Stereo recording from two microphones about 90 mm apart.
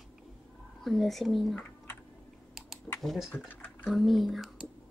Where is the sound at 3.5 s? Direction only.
20° left (ahead or behind).